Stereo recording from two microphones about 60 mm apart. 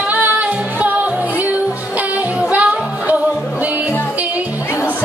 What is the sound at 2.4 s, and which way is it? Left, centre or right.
Music, right.